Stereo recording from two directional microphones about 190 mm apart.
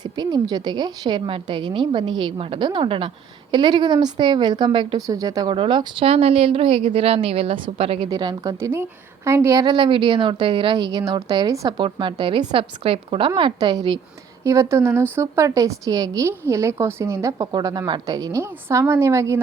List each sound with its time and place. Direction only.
0.0 s a woman's voice: 20° right (ahead or behind)